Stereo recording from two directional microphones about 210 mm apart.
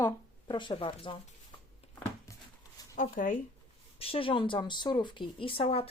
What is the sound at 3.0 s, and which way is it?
Speech, 40° left (ahead or behind).